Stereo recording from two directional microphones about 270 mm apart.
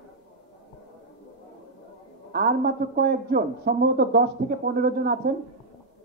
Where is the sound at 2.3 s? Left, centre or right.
Right.